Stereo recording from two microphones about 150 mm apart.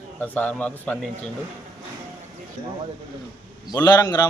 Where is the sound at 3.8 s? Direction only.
25° left (ahead or behind).